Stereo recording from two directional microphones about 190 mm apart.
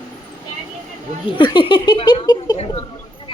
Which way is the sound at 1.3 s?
25° left (ahead or behind).